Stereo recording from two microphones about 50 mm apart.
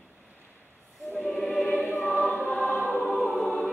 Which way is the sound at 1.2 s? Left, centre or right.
Centre.